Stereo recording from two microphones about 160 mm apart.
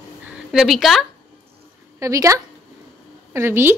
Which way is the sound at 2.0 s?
20° right (ahead or behind).